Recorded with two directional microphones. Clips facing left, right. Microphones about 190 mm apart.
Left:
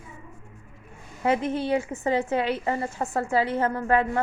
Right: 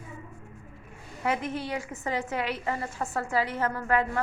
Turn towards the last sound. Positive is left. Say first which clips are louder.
# left 4 dB
turn(degrees=25)  # may be behind; listen again after turning